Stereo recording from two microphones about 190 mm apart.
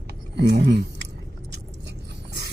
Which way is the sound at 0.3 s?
65° right (ahead or behind).